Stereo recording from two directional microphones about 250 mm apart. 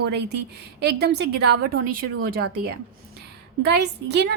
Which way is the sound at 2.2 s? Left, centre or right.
Right.